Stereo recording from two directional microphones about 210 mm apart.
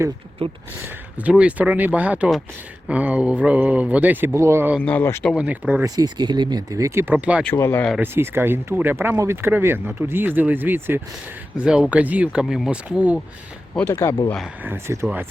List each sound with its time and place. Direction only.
0.4 s speech: 25° right (ahead or behind)
0.8 s speech: 5° right (ahead or behind)
4.8 s speech: 5° left (ahead or behind)
5.3 s speech: 5° right (ahead or behind)
6.0 s speech: 20° right (ahead or behind)
7.4 s speech: 10° left (ahead or behind)
7.9 s speech: 10° right (ahead or behind)
13.7 s speech: 10° left (ahead or behind)
14.6 s speech: 10° right (ahead or behind)